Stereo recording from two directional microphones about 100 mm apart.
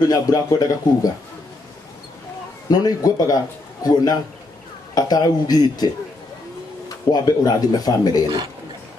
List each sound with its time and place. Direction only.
0.1 s a man's voice: 40° left (ahead or behind)
2.7 s a man's voice: 40° left (ahead or behind)
7.1 s a man's voice: 40° left (ahead or behind)